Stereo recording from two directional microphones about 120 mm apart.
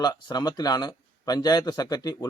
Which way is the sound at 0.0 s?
35° left (ahead or behind).